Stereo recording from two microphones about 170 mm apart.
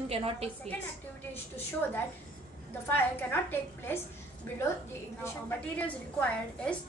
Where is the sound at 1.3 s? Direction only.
15° left (ahead or behind).